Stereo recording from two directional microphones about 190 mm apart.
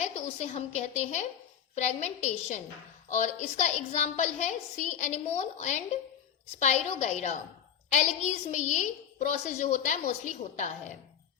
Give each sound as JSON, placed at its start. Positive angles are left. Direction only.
{"t": 0.0, "sound": "a woman's voice", "side_deg": 35}